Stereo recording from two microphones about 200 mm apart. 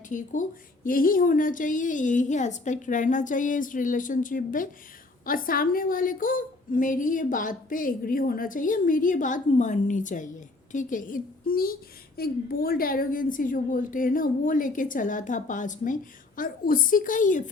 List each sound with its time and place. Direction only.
0.1 s a woman's voice: 40° left (ahead or behind)